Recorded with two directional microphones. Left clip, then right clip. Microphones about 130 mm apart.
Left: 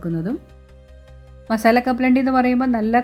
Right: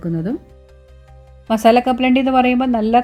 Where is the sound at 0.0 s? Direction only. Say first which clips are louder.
Right 2 dB; 10° right (ahead or behind).